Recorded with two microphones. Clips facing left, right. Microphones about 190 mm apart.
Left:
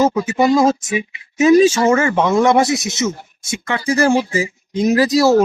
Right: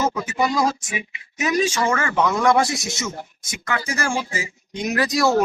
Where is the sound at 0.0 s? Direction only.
30° left (ahead or behind).